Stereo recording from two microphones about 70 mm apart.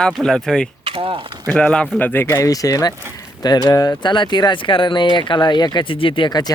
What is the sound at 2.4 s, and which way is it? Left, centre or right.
Speech, left.